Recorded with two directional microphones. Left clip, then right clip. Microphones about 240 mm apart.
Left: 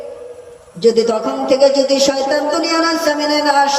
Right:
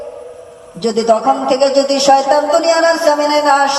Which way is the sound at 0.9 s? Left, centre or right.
Centre.